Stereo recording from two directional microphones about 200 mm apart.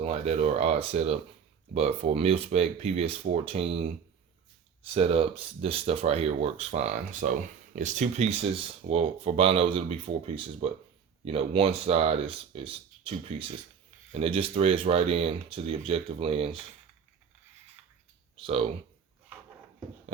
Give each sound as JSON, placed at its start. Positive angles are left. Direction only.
{"t": 0.0, "sound": "speech", "side_deg": -30}
{"t": 4.9, "sound": "speech", "side_deg": -30}
{"t": 18.4, "sound": "speech", "side_deg": -30}